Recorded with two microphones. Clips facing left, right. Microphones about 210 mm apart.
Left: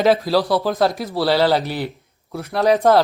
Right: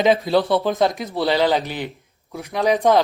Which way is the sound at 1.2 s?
15° right (ahead or behind).